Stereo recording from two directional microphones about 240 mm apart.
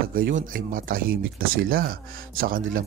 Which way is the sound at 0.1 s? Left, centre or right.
Right.